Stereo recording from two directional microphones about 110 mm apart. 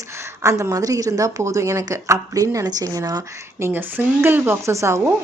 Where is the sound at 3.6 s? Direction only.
20° right (ahead or behind).